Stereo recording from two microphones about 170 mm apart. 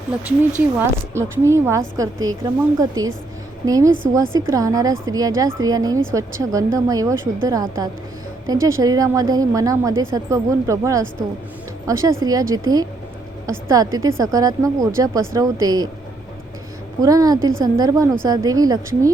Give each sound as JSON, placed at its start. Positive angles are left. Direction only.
{"t": 1.1, "sound": "a woman's voice", "side_deg": -15}
{"t": 17.0, "sound": "a woman's voice", "side_deg": -20}